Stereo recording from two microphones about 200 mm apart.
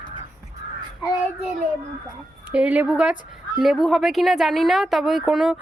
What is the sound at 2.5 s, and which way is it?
A woman's voice, 5° right (ahead or behind).